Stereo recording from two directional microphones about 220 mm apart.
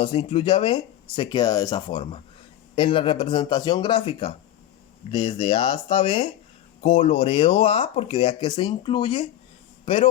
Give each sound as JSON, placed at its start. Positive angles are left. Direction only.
{"t": 0.0, "sound": "a man's voice", "side_deg": 25}